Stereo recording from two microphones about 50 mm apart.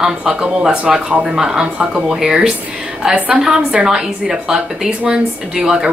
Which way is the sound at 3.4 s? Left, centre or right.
Centre.